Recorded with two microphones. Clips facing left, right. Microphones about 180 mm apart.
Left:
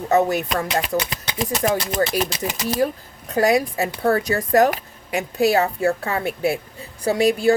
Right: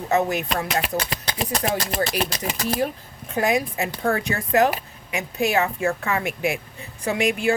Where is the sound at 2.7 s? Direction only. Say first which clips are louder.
Left 4 dB; 40° left (ahead or behind).